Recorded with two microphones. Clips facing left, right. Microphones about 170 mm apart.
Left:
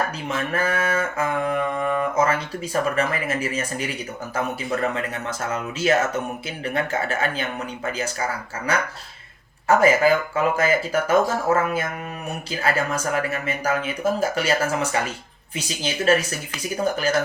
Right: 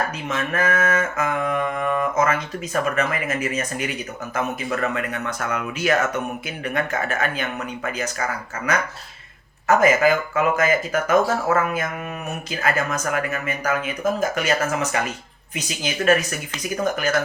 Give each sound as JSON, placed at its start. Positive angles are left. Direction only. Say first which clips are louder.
{"t": 0.3, "sound": "mantra", "louder": "right 3 dB", "side_deg": 30}
{"t": 4.4, "sound": "speech", "louder": "even", "side_deg": 30}
{"t": 9.6, "sound": "mantra", "louder": "even", "side_deg": 30}
{"t": 11.4, "sound": "speech", "louder": "even", "side_deg": 30}
{"t": 12.5, "sound": "mantra", "louder": "even", "side_deg": 30}